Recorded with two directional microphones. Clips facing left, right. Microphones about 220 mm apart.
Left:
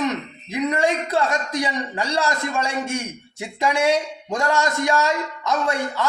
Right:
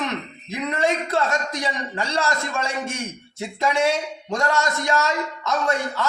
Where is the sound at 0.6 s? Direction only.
15° left (ahead or behind).